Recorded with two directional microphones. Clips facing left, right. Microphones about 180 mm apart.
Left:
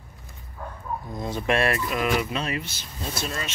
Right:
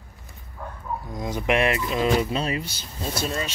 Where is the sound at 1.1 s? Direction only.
10° right (ahead or behind).